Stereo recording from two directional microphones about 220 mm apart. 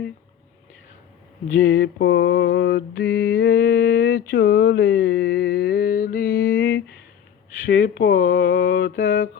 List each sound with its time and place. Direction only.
1.5 s mantra: 40° left (ahead or behind)
7.7 s speech: 50° left (ahead or behind)